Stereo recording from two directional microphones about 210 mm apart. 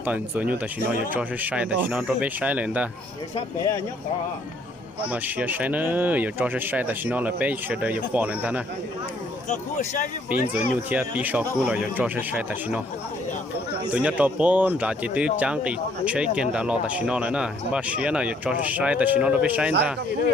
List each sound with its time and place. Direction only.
0.0 s speech: 5° right (ahead or behind)
3.3 s speech: 15° left (ahead or behind)
5.0 s speech: 5° right (ahead or behind)
9.5 s speech: 35° left (ahead or behind)
10.5 s speech: 5° right (ahead or behind)
13.9 s speech: 5° right (ahead or behind)